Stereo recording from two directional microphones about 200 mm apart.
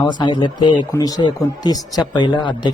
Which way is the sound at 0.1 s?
20° left (ahead or behind).